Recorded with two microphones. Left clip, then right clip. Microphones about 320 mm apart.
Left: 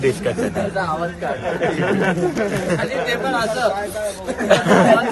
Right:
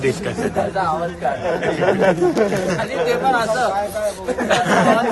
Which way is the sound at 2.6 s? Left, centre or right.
Centre.